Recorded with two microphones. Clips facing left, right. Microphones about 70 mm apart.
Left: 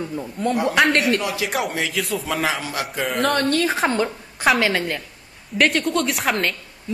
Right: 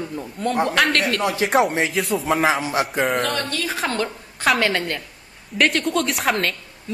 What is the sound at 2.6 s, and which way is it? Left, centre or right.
Speech, right.